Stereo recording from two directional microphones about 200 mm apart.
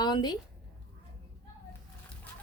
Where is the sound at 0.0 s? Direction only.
20° left (ahead or behind).